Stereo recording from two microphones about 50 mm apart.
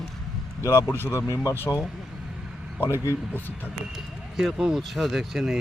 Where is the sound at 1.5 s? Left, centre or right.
Left.